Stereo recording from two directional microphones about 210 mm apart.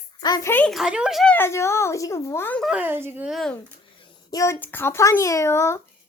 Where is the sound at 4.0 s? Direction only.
15° left (ahead or behind).